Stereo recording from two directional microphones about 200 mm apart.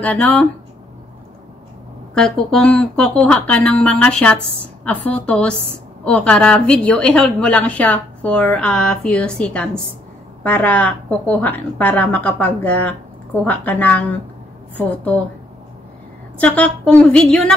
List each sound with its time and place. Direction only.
0.0 s a woman's voice: 10° left (ahead or behind)
2.1 s a woman's voice: 5° left (ahead or behind)
16.3 s a woman's voice: 5° left (ahead or behind)